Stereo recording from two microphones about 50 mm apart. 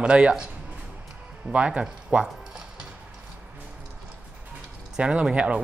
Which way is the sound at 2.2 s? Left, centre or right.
Centre.